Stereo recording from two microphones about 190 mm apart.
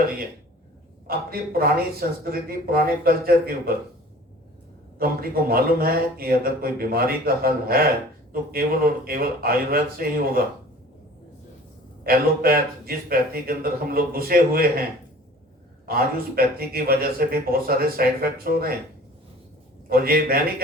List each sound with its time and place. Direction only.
1.0 s speech: 50° right (ahead or behind)
4.9 s speech: 50° right (ahead or behind)
12.0 s speech: 50° right (ahead or behind)
15.9 s speech: 50° right (ahead or behind)
19.9 s speech: 50° right (ahead or behind)